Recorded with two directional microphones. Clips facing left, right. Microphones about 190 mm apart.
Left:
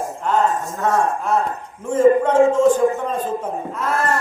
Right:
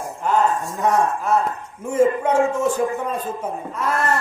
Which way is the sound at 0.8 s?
15° right (ahead or behind).